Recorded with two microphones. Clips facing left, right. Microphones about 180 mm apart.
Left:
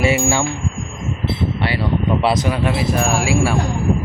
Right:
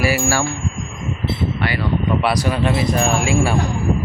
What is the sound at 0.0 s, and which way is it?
Speech, 20° left (ahead or behind).